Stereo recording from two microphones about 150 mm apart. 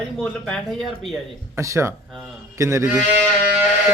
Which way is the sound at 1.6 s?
20° right (ahead or behind).